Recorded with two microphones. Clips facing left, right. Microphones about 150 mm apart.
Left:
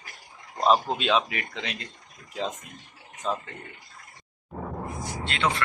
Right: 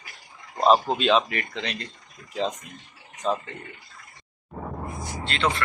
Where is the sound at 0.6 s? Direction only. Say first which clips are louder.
Right 3 dB; centre (ahead or behind).